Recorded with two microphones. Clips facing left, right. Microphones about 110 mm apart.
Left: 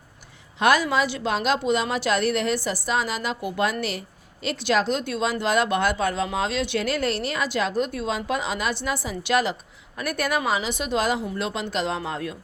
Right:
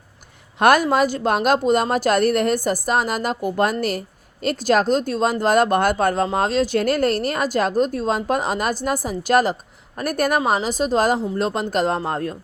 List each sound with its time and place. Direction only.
0.6 s speech: 50° right (ahead or behind)